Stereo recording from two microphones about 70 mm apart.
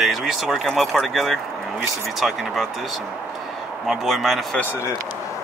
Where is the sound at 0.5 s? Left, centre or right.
Centre.